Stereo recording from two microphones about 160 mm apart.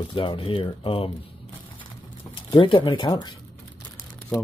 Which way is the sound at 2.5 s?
30° left (ahead or behind).